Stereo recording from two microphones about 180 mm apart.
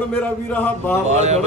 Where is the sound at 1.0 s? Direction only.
40° right (ahead or behind).